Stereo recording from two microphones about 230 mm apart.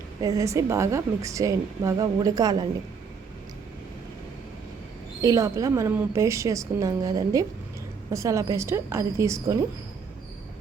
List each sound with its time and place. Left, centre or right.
0.2 s a woman's voice: centre
5.2 s a woman's voice: centre